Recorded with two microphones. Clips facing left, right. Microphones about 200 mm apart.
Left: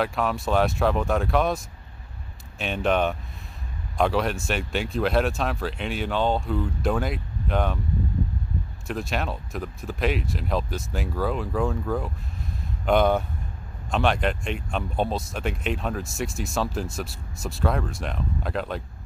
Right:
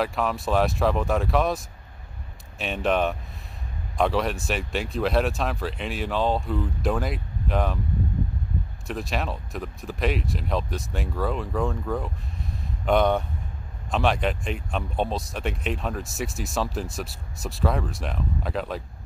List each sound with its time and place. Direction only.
0.0 s speech: centre (ahead or behind)
2.6 s speech: centre (ahead or behind)
8.8 s speech: centre (ahead or behind)